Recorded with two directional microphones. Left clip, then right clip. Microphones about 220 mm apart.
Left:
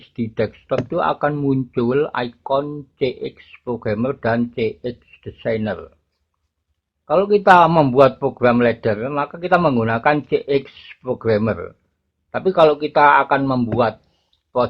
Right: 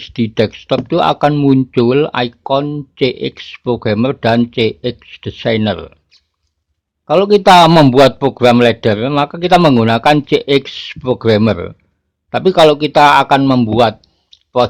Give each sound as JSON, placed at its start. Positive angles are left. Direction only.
{"t": 0.0, "sound": "speech", "side_deg": -25}
{"t": 7.0, "sound": "speech", "side_deg": -25}